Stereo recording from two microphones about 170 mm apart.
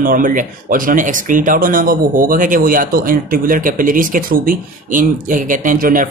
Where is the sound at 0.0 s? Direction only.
55° right (ahead or behind).